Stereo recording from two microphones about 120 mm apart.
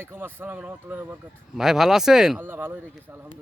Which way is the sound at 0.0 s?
20° right (ahead or behind).